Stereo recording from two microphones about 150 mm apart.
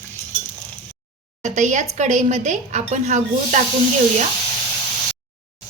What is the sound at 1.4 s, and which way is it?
Speech, 55° right (ahead or behind).